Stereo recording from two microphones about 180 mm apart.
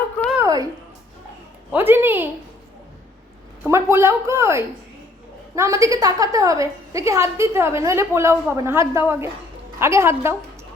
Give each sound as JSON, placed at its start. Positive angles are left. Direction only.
{"t": 0.3, "sound": "a sound", "side_deg": -20}
{"t": 1.7, "sound": "a woman's voice", "side_deg": -10}
{"t": 3.7, "sound": "a woman's voice", "side_deg": -15}